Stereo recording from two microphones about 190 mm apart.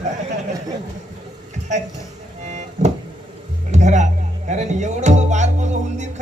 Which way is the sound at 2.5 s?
40° right (ahead or behind).